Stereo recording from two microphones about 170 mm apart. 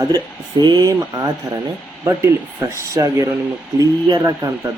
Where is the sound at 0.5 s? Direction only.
25° right (ahead or behind).